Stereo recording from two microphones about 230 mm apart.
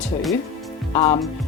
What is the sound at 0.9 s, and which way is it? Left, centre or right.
Speech, centre.